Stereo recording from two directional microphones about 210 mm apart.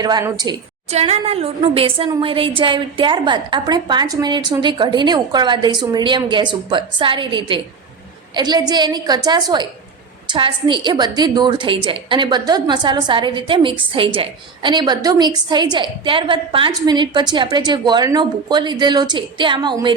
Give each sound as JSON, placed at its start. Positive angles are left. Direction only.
{"t": 0.0, "sound": "a woman's voice", "side_deg": -20}
{"t": 0.9, "sound": "a woman's voice", "side_deg": -30}